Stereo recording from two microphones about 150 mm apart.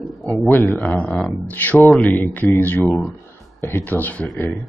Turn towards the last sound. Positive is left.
turn(degrees=10)  # may be behind; listen again after turning